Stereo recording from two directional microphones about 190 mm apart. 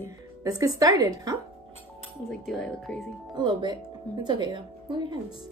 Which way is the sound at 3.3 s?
25° right (ahead or behind).